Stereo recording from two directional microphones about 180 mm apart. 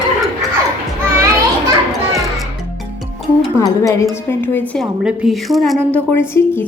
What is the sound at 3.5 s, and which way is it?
A woman's voice, 20° left (ahead or behind).